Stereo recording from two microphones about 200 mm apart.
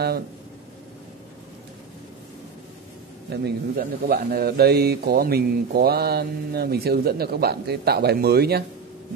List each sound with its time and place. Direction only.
3.3 s a man's voice: 50° right (ahead or behind)